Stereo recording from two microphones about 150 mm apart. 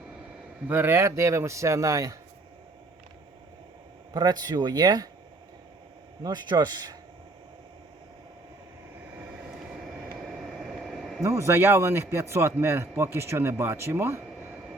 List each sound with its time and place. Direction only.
0.7 s a man's voice: 15° right (ahead or behind)
4.1 s a man's voice: 25° right (ahead or behind)
6.2 s a man's voice: 30° right (ahead or behind)
9.6 s a sound: 5° right (ahead or behind)
11.2 s a man's voice: 20° right (ahead or behind)